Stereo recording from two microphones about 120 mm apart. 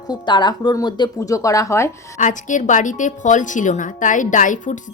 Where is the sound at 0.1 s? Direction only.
40° left (ahead or behind).